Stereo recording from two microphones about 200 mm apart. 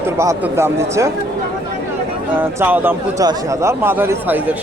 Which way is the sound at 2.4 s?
10° right (ahead or behind).